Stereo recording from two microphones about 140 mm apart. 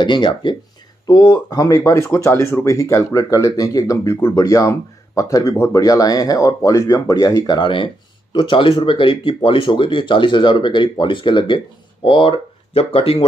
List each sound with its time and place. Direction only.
0.0 s speech: 35° left (ahead or behind)